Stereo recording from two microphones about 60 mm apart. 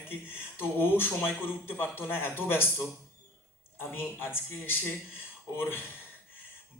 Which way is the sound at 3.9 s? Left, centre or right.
Left.